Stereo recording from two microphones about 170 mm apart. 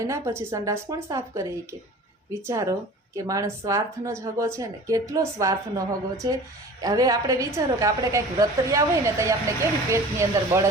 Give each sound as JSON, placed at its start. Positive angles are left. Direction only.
{"t": 0.0, "sound": "a woman's voice", "side_deg": -15}